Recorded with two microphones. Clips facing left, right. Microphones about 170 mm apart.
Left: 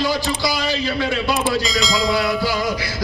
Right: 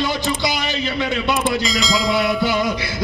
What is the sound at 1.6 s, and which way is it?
Speech, centre (ahead or behind).